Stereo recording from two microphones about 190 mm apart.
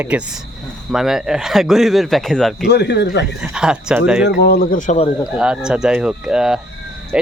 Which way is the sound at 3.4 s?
5° right (ahead or behind).